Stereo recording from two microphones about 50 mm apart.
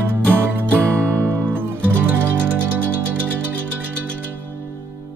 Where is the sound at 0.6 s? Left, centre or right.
Right.